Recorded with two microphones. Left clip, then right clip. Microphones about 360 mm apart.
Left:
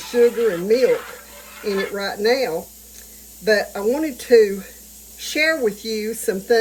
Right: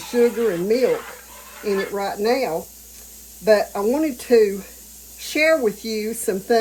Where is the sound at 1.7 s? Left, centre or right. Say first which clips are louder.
Even; right.